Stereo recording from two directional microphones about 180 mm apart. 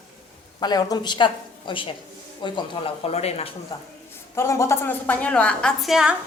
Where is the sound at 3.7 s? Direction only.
20° left (ahead or behind); by 6.1 s 5° right (ahead or behind).